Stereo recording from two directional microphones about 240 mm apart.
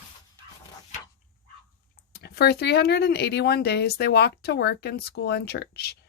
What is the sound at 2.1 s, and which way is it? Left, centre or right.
Speech, left.